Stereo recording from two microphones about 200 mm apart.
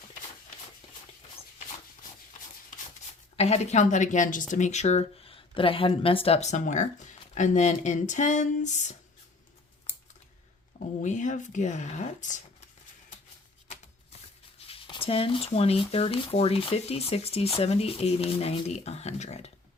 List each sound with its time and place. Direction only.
3.3 s speech: 35° left (ahead or behind)
11.0 s speech: 40° left (ahead or behind)
14.7 s speech: 25° left (ahead or behind)